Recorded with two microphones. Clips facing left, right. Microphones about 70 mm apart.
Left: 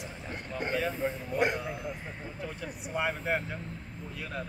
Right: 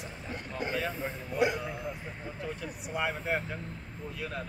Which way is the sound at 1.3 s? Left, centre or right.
Left.